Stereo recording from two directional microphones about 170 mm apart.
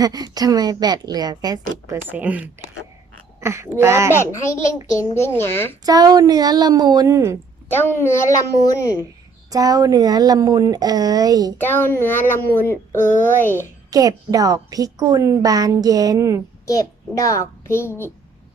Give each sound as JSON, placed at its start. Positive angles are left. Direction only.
{"t": 0.0, "sound": "a woman's voice", "side_deg": -25}
{"t": 2.0, "sound": "speech", "side_deg": -10}
{"t": 4.1, "sound": "a child's voice", "side_deg": 15}
{"t": 5.8, "sound": "a woman's voice", "side_deg": -20}
{"t": 7.7, "sound": "a child's voice", "side_deg": 15}
{"t": 9.5, "sound": "a woman's voice", "side_deg": -20}
{"t": 11.5, "sound": "a child's voice", "side_deg": 10}
{"t": 13.9, "sound": "a woman's voice", "side_deg": -20}
{"t": 16.6, "sound": "a child's voice", "side_deg": 20}